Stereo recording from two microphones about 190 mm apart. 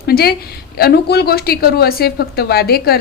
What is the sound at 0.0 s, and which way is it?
A woman's voice, 55° left (ahead or behind).